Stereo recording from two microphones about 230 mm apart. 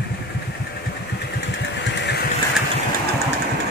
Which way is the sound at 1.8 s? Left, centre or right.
Left.